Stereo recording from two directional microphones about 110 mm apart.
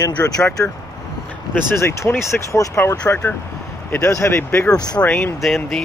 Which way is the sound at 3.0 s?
15° left (ahead or behind).